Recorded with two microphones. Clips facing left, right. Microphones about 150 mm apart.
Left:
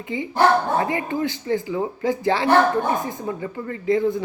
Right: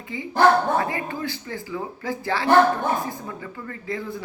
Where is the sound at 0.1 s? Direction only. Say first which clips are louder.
Even; 25° left (ahead or behind).